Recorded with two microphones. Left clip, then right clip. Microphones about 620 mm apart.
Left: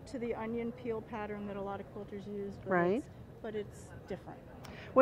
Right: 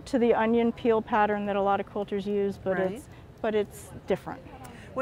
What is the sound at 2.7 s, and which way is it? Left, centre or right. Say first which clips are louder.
Speech: left 1 dB; left.